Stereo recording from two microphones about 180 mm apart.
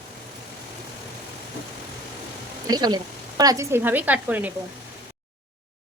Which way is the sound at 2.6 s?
20° right (ahead or behind).